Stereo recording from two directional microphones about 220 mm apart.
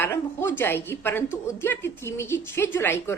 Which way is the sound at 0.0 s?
10° left (ahead or behind).